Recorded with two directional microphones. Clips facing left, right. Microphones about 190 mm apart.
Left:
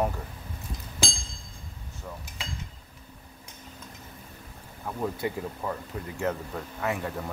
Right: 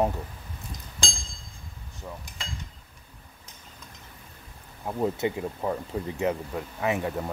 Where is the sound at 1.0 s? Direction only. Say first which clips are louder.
Left 3 dB; 5° left (ahead or behind).